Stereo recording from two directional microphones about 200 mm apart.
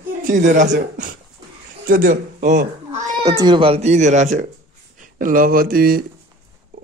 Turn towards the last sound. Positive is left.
turn(degrees=-45)  # may be behind; listen again after turning